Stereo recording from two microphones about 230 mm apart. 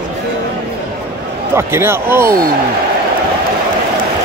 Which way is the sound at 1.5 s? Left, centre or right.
Centre.